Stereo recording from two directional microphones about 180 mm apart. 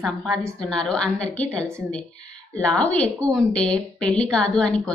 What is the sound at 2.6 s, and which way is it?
A woman's voice, 5° left (ahead or behind).